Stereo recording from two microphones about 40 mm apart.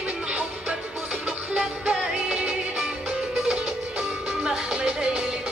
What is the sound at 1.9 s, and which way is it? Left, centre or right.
Music, centre.